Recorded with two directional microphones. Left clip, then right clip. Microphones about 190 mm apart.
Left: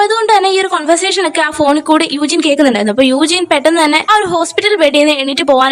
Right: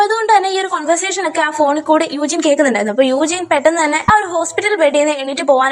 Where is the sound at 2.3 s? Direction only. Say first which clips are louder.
Left 2 dB; 40° left (ahead or behind).